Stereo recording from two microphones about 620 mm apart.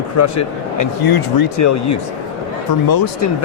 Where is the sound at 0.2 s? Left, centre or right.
Left.